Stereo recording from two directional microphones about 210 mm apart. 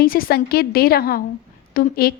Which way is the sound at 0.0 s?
45° left (ahead or behind).